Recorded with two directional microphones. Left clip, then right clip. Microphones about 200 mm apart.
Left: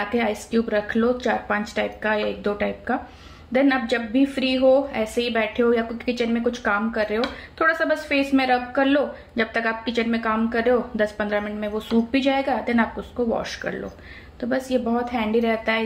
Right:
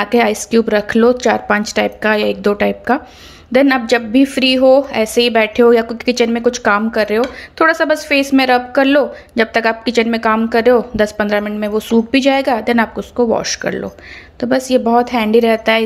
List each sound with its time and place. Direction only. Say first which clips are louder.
0.0 s a woman's voice: right 10 dB; 45° right (ahead or behind)